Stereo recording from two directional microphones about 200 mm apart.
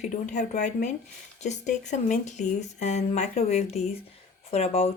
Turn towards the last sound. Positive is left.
turn(degrees=30)  # may be behind; listen again after turning